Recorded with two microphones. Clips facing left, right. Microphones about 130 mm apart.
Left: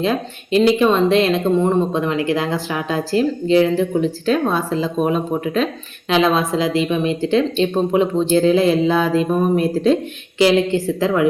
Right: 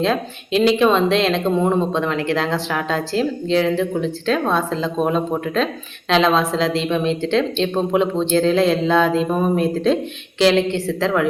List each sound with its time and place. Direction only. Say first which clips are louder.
0.0 s speech: even; 5° left (ahead or behind)